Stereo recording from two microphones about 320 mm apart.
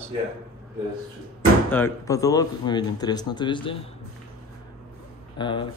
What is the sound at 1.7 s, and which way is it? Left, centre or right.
Speech, centre.